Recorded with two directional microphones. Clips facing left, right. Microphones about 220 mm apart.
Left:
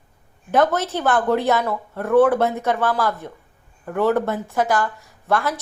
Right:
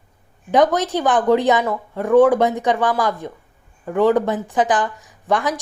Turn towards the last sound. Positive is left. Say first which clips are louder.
# right 2 dB
turn(degrees=-15)  # may be behind; listen again after turning